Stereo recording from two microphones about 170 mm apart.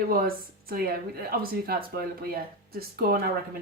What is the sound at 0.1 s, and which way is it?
A woman's voice, 60° right (ahead or behind).